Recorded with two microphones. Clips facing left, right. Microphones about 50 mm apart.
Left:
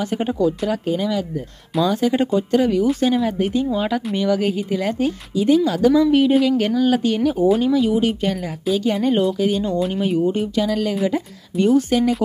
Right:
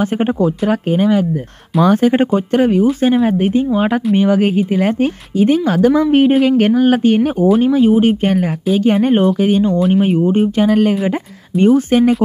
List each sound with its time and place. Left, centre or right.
0.7 s speech: right
7.3 s speech: centre
7.6 s speech: right
9.8 s speech: centre
10.0 s speech: right